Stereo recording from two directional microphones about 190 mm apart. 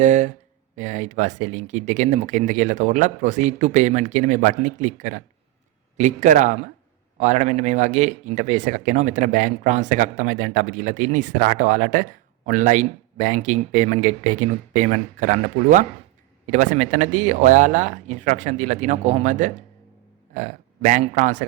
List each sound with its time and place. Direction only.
0.0 s speech: 40° right (ahead or behind)